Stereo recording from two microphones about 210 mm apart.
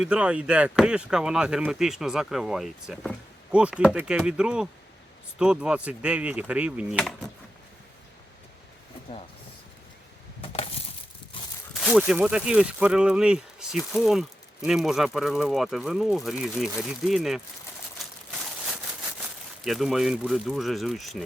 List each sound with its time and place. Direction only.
0.0 s speech: 5° right (ahead or behind)
10.4 s coin: 30° left (ahead or behind)
11.7 s speech: centre (ahead or behind)
18.0 s a sound: centre (ahead or behind)
19.6 s speech: centre (ahead or behind)